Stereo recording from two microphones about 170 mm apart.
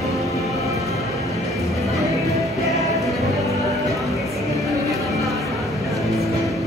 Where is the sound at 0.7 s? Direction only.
20° right (ahead or behind).